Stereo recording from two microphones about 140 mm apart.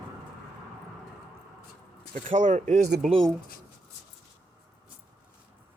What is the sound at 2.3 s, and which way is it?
Speech, 55° right (ahead or behind).